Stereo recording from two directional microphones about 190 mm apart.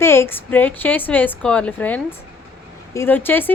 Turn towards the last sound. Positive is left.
turn(degrees=10)  # may be behind; listen again after turning